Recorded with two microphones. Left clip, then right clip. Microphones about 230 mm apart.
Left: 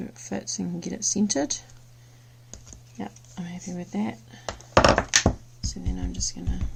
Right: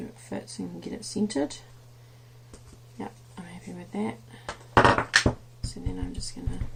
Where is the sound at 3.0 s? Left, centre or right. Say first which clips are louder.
Left 2 dB; left.